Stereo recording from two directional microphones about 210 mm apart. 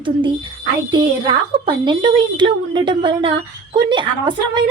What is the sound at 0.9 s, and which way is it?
A woman's voice, 20° right (ahead or behind).